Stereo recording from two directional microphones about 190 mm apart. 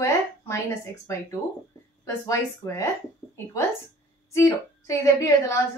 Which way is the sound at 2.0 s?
15° left (ahead or behind).